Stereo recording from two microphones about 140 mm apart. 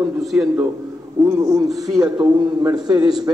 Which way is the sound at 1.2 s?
20° right (ahead or behind).